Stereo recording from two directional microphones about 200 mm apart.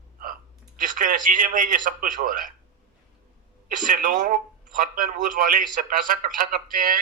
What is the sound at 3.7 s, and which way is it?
A man's voice, 40° right (ahead or behind).